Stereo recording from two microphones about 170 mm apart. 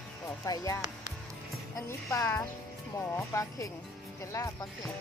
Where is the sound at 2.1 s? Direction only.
20° left (ahead or behind).